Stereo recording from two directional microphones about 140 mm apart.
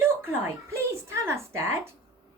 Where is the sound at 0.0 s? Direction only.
15° right (ahead or behind).